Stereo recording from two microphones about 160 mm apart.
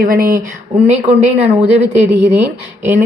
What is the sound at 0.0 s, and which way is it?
Speech, 60° right (ahead or behind).